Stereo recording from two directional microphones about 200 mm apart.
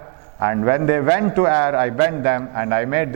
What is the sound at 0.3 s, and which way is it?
A man's voice, 20° right (ahead or behind).